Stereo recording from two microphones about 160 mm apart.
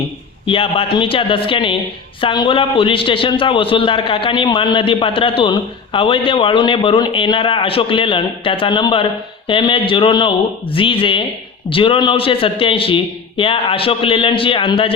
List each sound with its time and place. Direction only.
0.4 s a man's voice: 35° left (ahead or behind)